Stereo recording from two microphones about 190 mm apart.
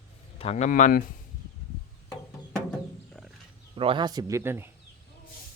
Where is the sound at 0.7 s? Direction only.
45° left (ahead or behind).